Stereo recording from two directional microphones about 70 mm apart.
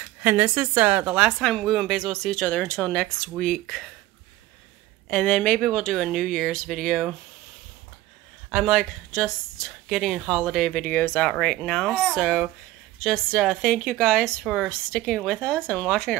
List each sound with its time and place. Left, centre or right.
0.2 s a woman's voice: right
1.4 s a woman's voice: centre
5.0 s speech: centre
8.5 s speech: centre
10.7 s speech: left
11.2 s a woman's voice: centre